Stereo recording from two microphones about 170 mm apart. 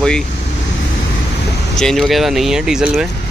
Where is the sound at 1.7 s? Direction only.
5° left (ahead or behind).